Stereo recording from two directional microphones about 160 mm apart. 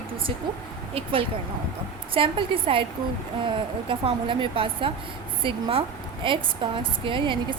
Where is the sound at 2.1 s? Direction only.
35° right (ahead or behind).